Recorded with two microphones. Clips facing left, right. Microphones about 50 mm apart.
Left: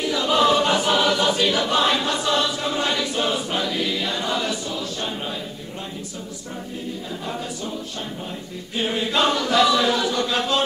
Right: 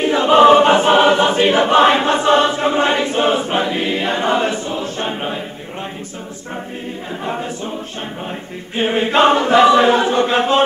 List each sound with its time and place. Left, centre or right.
0.0 s choir: right
7.2 s a capella: right
8.7 s chant: right